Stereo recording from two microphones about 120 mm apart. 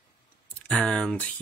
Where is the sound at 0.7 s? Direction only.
10° left (ahead or behind).